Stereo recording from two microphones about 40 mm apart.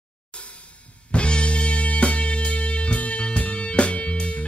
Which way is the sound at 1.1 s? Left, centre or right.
Left.